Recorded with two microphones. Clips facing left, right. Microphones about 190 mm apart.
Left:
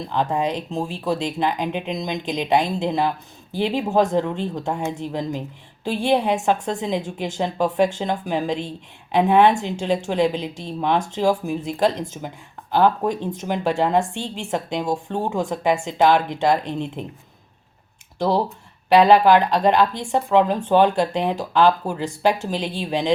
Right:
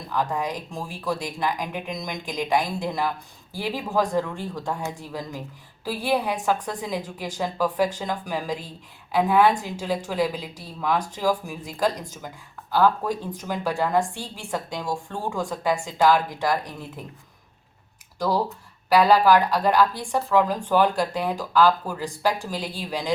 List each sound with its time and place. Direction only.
0.1 s a woman's voice: 25° left (ahead or behind)
18.2 s a woman's voice: 20° left (ahead or behind)